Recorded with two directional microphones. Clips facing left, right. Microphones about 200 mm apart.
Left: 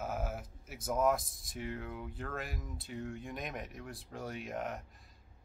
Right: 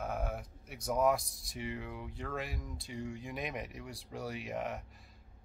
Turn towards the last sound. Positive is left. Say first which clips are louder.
# right 1 dB
turn(degrees=0)  # may be behind; listen again after turning